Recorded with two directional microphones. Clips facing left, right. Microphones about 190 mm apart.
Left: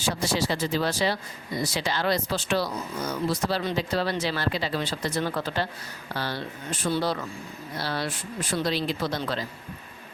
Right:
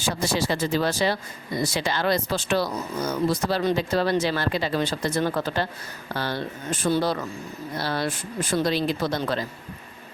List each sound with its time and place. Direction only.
0.2 s speech: 50° right (ahead or behind)